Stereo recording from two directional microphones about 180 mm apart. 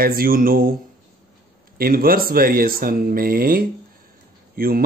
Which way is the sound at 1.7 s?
55° right (ahead or behind).